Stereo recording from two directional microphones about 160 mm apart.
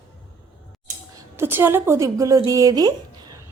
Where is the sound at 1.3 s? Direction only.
15° right (ahead or behind).